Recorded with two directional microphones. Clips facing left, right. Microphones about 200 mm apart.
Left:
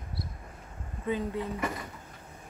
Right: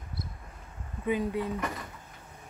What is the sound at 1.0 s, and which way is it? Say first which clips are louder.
Speech: right 2 dB; 15° right (ahead or behind).